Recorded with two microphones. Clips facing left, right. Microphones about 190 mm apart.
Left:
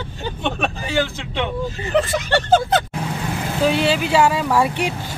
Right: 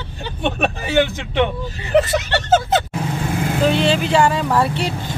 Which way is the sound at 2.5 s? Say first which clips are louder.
Right 1 dB; 5° right (ahead or behind).